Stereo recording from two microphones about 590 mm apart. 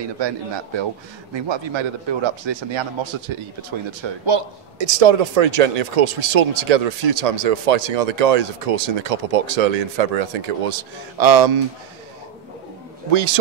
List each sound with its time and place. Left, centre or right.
1.3 s a man's voice: right
13.1 s a man's voice: right